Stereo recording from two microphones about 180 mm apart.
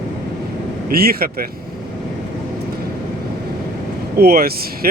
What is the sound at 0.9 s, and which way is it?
Speech, 55° right (ahead or behind).